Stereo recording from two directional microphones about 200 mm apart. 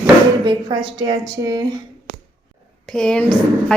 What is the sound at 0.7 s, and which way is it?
Speech, 20° right (ahead or behind).